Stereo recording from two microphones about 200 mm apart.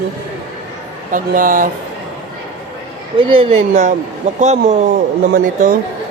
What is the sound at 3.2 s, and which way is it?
Speech, 25° right (ahead or behind).